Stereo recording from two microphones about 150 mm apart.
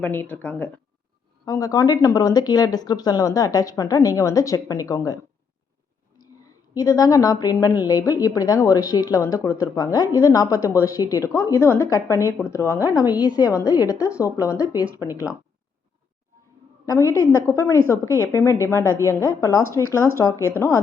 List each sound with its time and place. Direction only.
0.0 s speech: 10° left (ahead or behind)
1.5 s speech: 20° left (ahead or behind)
6.4 s speech: 25° left (ahead or behind)
16.8 s speech: 20° left (ahead or behind)